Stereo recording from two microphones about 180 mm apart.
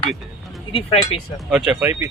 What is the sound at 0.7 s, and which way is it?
Speech, 35° left (ahead or behind).